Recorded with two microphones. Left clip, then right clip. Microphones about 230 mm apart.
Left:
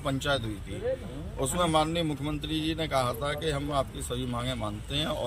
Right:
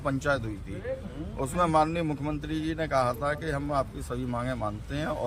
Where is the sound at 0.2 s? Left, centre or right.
Centre.